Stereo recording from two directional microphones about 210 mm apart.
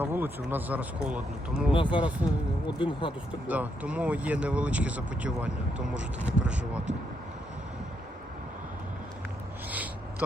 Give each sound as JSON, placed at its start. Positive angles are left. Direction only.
{"t": 0.0, "sound": "speech", "side_deg": -10}
{"t": 1.7, "sound": "speech", "side_deg": 25}
{"t": 2.0, "sound": "speech", "side_deg": -5}
{"t": 2.7, "sound": "speech", "side_deg": 25}
{"t": 3.4, "sound": "speech", "side_deg": -5}
{"t": 9.6, "sound": "a sound", "side_deg": -5}